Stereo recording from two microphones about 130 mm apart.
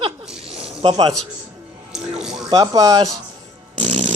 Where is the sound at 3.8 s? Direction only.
65° right (ahead or behind).